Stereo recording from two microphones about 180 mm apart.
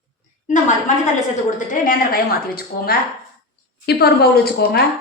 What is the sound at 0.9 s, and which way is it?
A woman's voice, 45° left (ahead or behind).